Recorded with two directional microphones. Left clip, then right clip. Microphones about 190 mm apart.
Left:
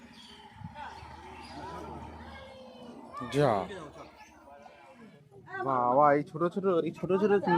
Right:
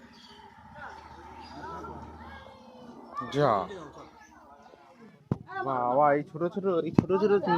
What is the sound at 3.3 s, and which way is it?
Speech, 25° left (ahead or behind).